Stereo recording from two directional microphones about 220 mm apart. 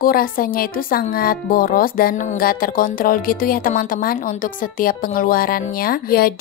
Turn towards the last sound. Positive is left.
turn(degrees=45)  # may be behind; listen again after turning